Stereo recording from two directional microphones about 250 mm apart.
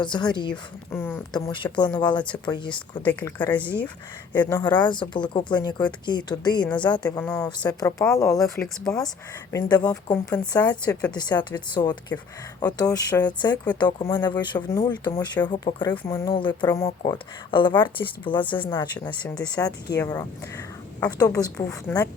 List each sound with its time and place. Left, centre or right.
0.0 s speech: centre
0.5 s speech: centre
1.4 s speech: centre
3.0 s speech: centre
11.1 s speech: centre
19.0 s speech: centre